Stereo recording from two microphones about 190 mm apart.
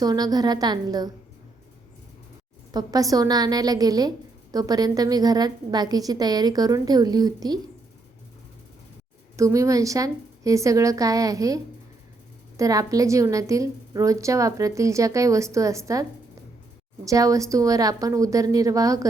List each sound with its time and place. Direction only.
0.0 s a woman's voice: 20° right (ahead or behind)
2.7 s a woman's voice: 20° right (ahead or behind)
9.3 s a woman's voice: 15° right (ahead or behind)
17.1 s a woman's voice: 15° right (ahead or behind)